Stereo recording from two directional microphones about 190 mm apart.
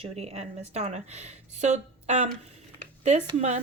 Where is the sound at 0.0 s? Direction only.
35° right (ahead or behind).